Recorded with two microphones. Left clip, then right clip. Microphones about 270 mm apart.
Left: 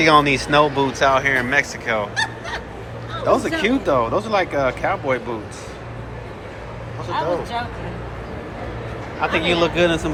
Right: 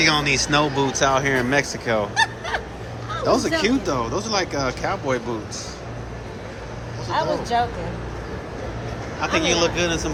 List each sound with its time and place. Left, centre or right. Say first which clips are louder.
0.0 s speech: left 4 dB; centre
3.2 s speech: left 2 dB; centre
7.1 s speech: right 1 dB; right
9.2 s speech: left 2 dB; centre